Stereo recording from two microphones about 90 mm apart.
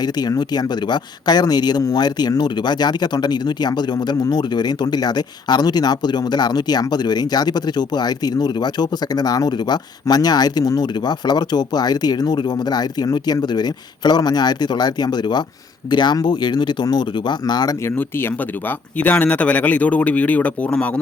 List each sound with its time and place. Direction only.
0.0 s speech: 50° left (ahead or behind)
17.8 s speech: 25° left (ahead or behind)